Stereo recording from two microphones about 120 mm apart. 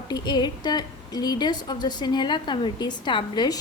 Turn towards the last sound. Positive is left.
turn(degrees=40)  # may be behind; listen again after turning